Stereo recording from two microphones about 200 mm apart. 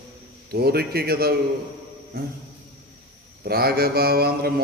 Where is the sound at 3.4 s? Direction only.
50° right (ahead or behind).